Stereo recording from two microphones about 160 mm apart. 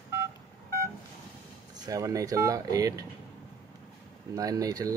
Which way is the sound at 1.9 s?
20° right (ahead or behind).